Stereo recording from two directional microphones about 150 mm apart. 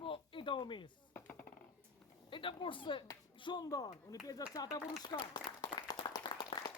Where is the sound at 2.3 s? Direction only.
35° left (ahead or behind).